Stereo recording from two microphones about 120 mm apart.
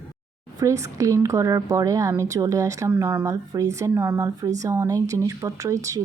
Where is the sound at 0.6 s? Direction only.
25° right (ahead or behind).